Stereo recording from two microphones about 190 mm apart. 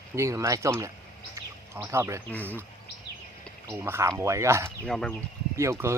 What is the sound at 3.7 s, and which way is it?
A man's voice, 15° right (ahead or behind).